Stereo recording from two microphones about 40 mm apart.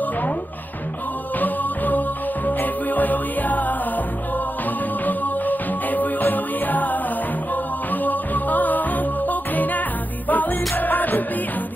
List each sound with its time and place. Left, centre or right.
1.4 s music: left
5.0 s music: left